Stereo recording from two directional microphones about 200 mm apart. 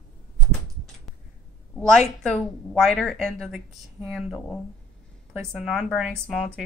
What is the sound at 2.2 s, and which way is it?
Speech, 5° left (ahead or behind).